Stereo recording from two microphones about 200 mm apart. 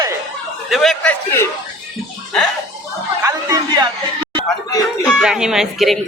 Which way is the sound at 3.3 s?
20° right (ahead or behind).